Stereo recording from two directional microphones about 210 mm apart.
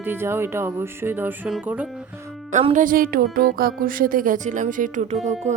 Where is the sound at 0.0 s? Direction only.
10° right (ahead or behind).